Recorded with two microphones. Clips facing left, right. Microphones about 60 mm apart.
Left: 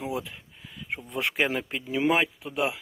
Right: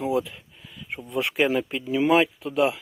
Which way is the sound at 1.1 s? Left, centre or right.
Left.